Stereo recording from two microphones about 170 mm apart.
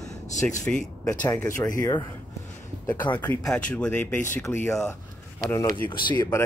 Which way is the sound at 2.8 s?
10° left (ahead or behind).